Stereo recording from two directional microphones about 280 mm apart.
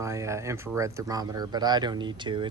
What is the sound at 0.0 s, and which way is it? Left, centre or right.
Speech, centre.